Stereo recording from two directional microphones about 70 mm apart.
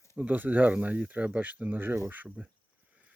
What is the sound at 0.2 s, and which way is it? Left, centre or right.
Speech, right.